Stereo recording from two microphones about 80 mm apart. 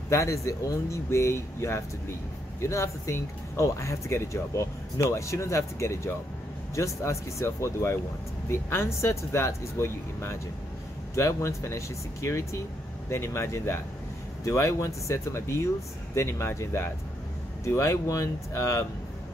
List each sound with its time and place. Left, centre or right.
0.1 s speech: left